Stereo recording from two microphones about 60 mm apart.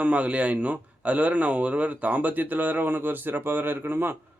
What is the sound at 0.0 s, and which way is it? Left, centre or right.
A man's voice, right.